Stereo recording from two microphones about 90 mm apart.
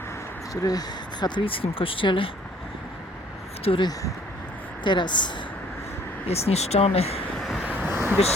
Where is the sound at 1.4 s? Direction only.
85° left; by 2.3 s 70° left (ahead or behind).